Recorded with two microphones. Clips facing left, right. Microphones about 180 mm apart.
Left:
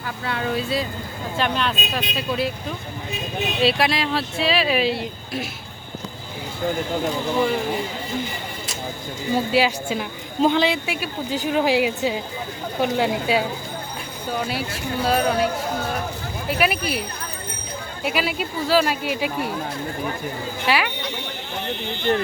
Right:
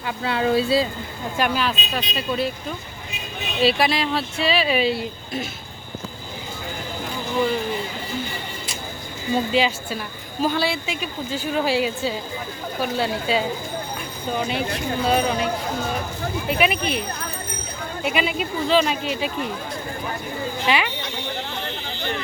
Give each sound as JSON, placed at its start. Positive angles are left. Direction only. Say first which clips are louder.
{"t": 0.0, "sound": "speech", "louder": "right 4 dB", "side_deg": -30}
{"t": 1.4, "sound": "speech", "louder": "right 1 dB", "side_deg": -5}
{"t": 3.6, "sound": "speech", "louder": "right 1 dB", "side_deg": 0}
{"t": 9.3, "sound": "a woman's voice", "louder": "left 1 dB", "side_deg": 10}
{"t": 16.5, "sound": "speech", "louder": "even", "side_deg": 5}
{"t": 18.0, "sound": "a woman's voice", "louder": "right 1 dB", "side_deg": 5}
{"t": 20.7, "sound": "speech", "louder": "left 1 dB", "side_deg": 5}